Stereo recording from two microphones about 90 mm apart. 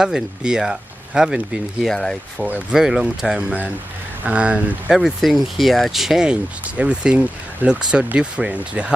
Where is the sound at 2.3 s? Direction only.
15° right (ahead or behind).